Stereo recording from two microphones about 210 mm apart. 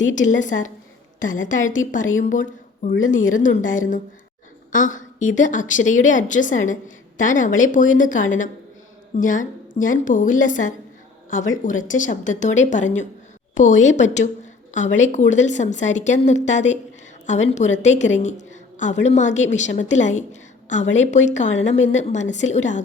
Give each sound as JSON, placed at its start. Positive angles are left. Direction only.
{"t": 0.1, "sound": "a woman's voice", "side_deg": 35}